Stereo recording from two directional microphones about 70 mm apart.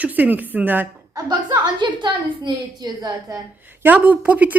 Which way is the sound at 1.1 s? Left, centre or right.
Right.